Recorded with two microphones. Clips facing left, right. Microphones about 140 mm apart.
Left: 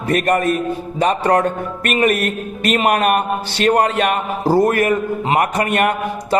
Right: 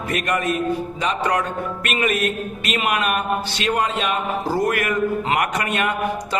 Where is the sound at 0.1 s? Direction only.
45° left (ahead or behind).